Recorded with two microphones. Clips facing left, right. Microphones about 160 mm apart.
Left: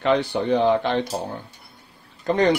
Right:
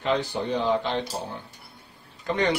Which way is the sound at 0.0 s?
65° left (ahead or behind).